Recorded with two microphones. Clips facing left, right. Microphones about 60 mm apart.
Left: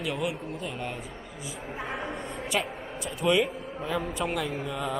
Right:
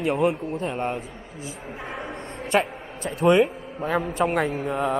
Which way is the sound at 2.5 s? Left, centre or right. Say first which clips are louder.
Right 9 dB; right.